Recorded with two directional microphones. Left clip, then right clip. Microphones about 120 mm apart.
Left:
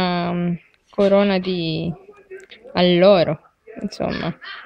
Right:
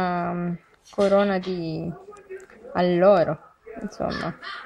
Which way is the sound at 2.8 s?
20° left (ahead or behind).